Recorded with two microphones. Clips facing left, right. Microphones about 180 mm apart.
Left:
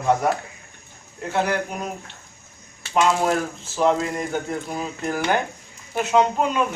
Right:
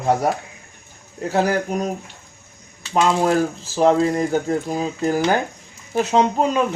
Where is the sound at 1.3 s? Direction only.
40° right (ahead or behind).